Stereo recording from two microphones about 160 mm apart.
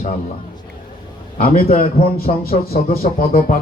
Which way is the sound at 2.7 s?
65° left (ahead or behind).